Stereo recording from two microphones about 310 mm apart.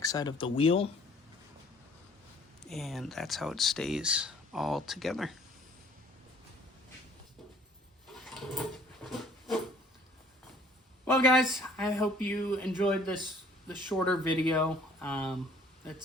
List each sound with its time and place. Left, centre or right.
0.0 s speech: centre
2.6 s speech: centre
8.2 s drawer open or close: centre
9.0 s a sound: centre
11.0 s speech: centre